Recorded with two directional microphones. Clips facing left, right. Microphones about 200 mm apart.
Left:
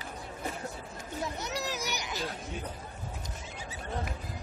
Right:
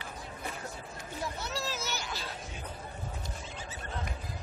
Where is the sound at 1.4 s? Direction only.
15° left (ahead or behind).